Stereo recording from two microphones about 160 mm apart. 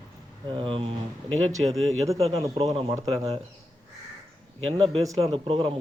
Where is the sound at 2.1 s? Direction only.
40° right (ahead or behind).